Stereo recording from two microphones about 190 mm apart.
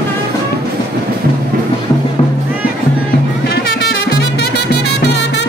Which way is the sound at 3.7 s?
60° left (ahead or behind).